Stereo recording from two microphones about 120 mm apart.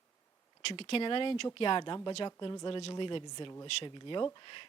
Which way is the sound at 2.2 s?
35° left (ahead or behind).